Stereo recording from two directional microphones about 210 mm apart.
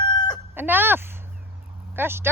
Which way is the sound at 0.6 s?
10° right (ahead or behind).